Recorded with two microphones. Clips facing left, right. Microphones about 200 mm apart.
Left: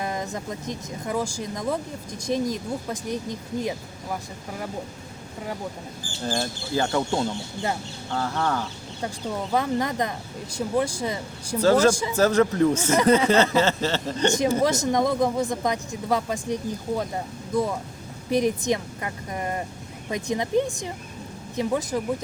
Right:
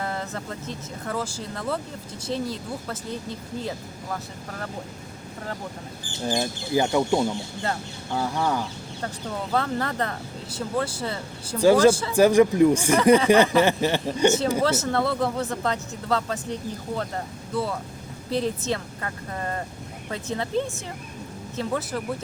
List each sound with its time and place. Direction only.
0.0 s speech: 15° left (ahead or behind)
6.1 s speech: 15° right (ahead or behind)
9.5 s speech: 15° left (ahead or behind)
11.6 s speech: 15° right (ahead or behind)
11.9 s speech: 15° left (ahead or behind)
12.1 s speech: 15° right (ahead or behind)
14.6 s speech: 15° left (ahead or behind)